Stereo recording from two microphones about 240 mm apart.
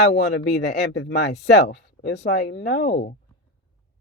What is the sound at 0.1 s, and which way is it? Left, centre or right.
Speech, left.